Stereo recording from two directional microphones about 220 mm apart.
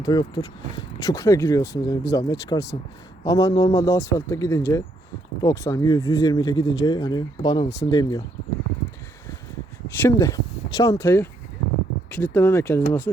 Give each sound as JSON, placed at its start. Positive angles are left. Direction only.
{"t": 0.0, "sound": "speech", "side_deg": 20}
{"t": 10.0, "sound": "speech", "side_deg": 15}